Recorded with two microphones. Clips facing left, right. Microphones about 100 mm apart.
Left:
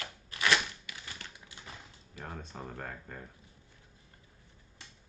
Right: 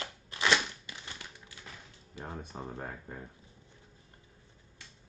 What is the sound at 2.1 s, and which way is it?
Speech, 20° right (ahead or behind).